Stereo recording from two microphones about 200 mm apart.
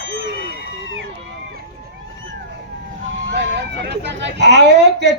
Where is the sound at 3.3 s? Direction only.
60° right (ahead or behind).